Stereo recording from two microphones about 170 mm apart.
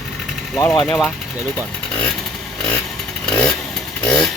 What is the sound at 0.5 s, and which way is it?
Speech, 25° left (ahead or behind).